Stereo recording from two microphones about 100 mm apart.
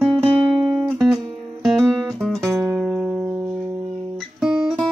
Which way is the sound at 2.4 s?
25° right (ahead or behind).